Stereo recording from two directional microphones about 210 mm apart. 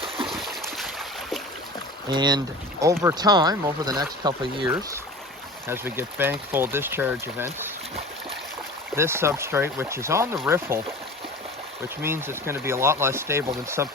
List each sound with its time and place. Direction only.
0.3 s a sound: centre (ahead or behind)
2.0 s speech: 20° right (ahead or behind)
5.6 s speech: 10° right (ahead or behind)
9.0 s speech: 10° right (ahead or behind)
12.0 s speech: 10° right (ahead or behind)